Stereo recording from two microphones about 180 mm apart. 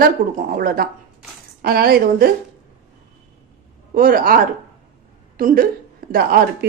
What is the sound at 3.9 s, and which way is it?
A woman's voice, 50° right (ahead or behind).